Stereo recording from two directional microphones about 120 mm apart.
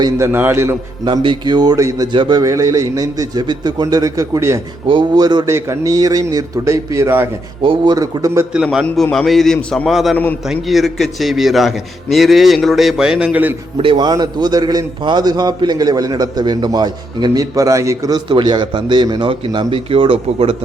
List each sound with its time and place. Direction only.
0.3 s a man's voice: 15° right (ahead or behind)
1.0 s a man's voice: 40° right (ahead or behind)
2.1 s a man's voice: 45° right (ahead or behind)
2.4 s a man's voice: 25° right (ahead or behind)
4.9 s a man's voice: 40° right (ahead or behind)
5.5 s a man's voice: 25° right (ahead or behind)
7.6 s a man's voice: 45° right (ahead or behind)
7.9 s a man's voice: 30° right (ahead or behind)
8.5 s a man's voice: 10° right (ahead or behind)
13.7 s a man's voice: 45° right (ahead or behind); by 18.2 s 25° right (ahead or behind)
18.3 s a man's voice: 40° right (ahead or behind)
19.3 s a man's voice: 45° right (ahead or behind)